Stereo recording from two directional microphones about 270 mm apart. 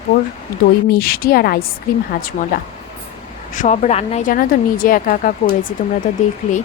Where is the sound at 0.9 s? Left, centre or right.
Left.